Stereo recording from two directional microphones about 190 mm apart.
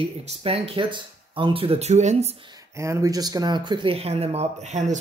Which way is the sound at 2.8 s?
15° right (ahead or behind).